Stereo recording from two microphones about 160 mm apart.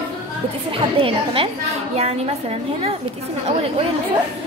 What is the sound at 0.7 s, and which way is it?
Speech, 35° right (ahead or behind).